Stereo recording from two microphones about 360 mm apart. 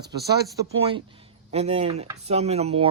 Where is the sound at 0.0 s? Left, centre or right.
Right.